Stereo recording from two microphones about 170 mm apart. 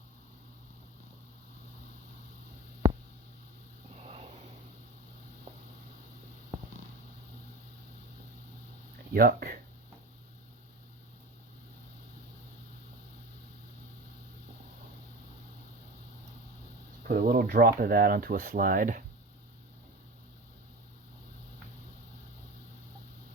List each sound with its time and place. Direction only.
4.0 s a sound: 40° right (ahead or behind)
9.1 s speech: 60° right (ahead or behind)
17.1 s speech: 60° right (ahead or behind)